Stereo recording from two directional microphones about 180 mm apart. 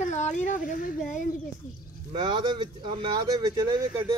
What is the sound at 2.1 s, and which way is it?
Speech, 25° right (ahead or behind).